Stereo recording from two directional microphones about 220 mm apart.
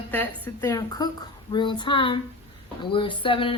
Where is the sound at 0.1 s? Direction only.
10° left (ahead or behind).